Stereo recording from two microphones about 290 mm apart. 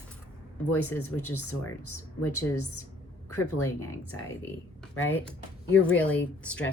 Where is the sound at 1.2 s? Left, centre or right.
Left.